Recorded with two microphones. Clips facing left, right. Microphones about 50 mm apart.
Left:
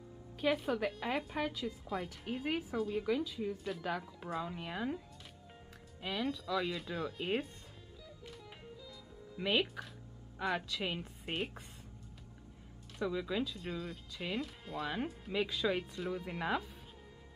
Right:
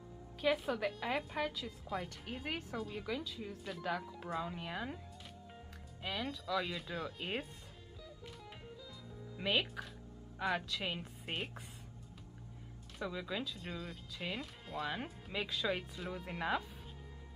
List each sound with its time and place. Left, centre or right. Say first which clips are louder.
0.4 s a woman's voice: left 1 dB; centre
6.0 s a woman's voice: left 3 dB; centre
9.4 s a woman's voice: left 2 dB; centre
13.0 s a woman's voice: left 5 dB; centre